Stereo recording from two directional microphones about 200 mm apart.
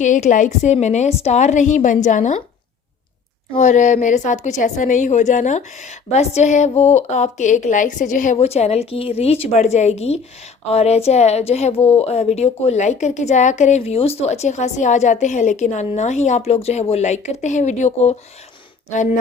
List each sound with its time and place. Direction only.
0.0 s a woman's voice: 40° left (ahead or behind)
3.5 s a woman's voice: 35° left (ahead or behind)